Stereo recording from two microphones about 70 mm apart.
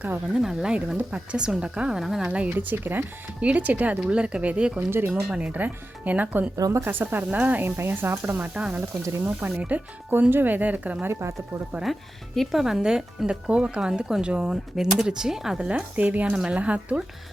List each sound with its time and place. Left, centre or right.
0.3 s speech: centre
2.0 s speech: centre
2.2 s speech: centre
4.9 s speech: right
5.3 s speech: centre
6.6 s speech: right
6.8 s speech: right
7.8 s speech: right
8.4 s speech: centre
11.1 s speech: right
11.8 s speech: centre
15.7 s speech: right